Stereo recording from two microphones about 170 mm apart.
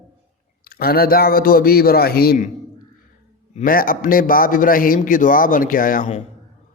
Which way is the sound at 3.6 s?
55° left (ahead or behind).